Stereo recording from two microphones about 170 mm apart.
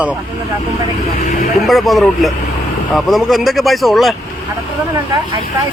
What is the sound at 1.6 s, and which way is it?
Speech, centre (ahead or behind).